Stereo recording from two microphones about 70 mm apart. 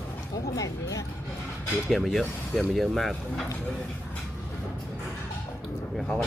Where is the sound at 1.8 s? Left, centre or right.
Centre.